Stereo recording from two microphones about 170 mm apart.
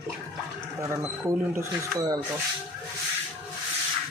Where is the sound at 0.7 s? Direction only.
15° right (ahead or behind).